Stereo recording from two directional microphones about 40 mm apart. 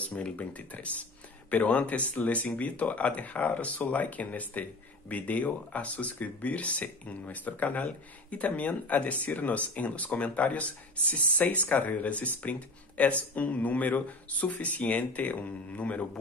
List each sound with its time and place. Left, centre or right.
0.0 s speech: left